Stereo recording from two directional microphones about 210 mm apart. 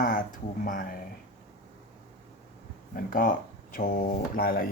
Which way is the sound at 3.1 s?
40° left (ahead or behind).